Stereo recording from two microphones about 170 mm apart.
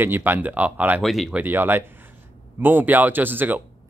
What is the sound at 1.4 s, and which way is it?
Speech, 10° right (ahead or behind).